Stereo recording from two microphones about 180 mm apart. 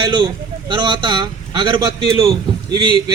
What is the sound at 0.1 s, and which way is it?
Speech, 25° right (ahead or behind).